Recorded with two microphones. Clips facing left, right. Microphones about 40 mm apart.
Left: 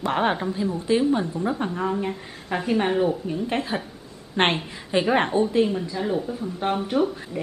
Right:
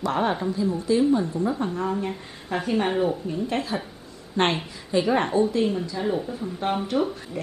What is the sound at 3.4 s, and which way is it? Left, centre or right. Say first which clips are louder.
A woman's voice: left 1 dB; left.